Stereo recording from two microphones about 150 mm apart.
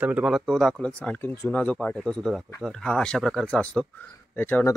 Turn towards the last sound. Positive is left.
turn(degrees=10)  # may be behind; listen again after turning